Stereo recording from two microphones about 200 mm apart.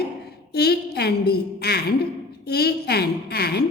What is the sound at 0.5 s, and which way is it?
A woman's voice, 55° left (ahead or behind).